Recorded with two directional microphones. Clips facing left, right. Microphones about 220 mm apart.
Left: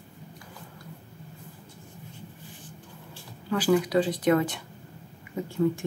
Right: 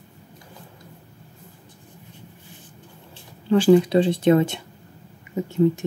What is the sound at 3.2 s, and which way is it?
A woman's voice, 25° right (ahead or behind).